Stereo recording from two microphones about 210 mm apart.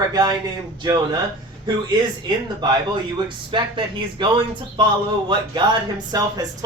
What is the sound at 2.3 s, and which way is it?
Speech, 20° right (ahead or behind).